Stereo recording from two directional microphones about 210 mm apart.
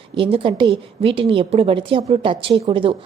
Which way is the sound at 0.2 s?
25° right (ahead or behind).